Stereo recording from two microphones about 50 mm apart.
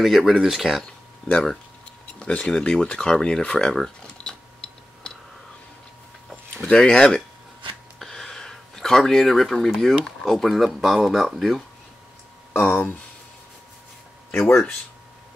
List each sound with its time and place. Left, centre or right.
0.0 s speech: centre
1.3 s speech: centre
2.1 s a sound: left
2.4 s speech: centre
6.7 s speech: centre
12.6 s speech: left
14.4 s speech: centre